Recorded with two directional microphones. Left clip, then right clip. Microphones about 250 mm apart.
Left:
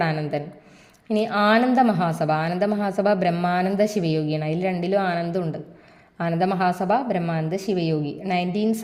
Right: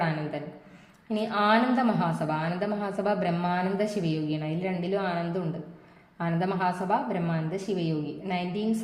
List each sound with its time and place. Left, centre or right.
0.0 s a man's voice: left